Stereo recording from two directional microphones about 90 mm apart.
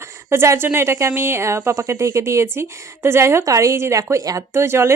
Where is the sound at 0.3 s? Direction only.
30° right (ahead or behind).